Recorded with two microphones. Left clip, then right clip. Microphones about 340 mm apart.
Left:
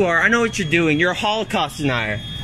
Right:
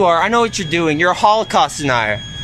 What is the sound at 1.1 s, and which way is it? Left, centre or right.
Speech, right.